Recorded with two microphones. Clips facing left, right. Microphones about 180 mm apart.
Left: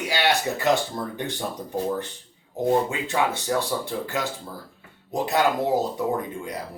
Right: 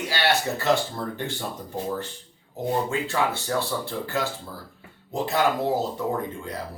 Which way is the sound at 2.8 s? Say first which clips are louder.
Even; 15° left (ahead or behind).